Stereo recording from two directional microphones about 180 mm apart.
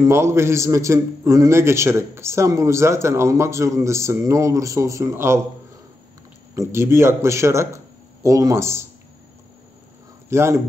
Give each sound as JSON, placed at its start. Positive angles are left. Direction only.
{"t": 0.0, "sound": "a man's voice", "side_deg": -15}
{"t": 6.5, "sound": "speech", "side_deg": -15}
{"t": 10.3, "sound": "a man's voice", "side_deg": -15}